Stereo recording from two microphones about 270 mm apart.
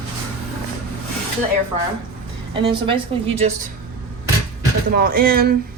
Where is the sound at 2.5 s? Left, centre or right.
Centre.